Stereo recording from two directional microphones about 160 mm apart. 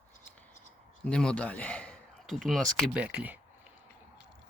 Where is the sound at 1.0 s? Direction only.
5° left (ahead or behind).